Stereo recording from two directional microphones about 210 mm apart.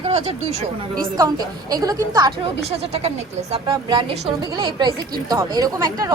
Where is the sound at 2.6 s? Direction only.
30° right (ahead or behind).